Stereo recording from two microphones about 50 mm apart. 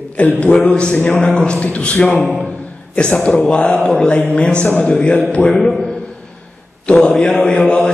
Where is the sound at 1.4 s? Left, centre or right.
Left.